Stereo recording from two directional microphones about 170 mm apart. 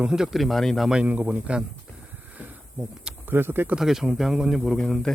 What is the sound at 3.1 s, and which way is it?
Speech, 10° right (ahead or behind).